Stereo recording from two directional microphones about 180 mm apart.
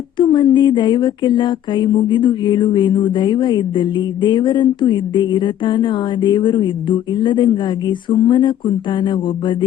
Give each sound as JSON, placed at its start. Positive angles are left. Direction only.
{"t": 0.2, "sound": "speech", "side_deg": 25}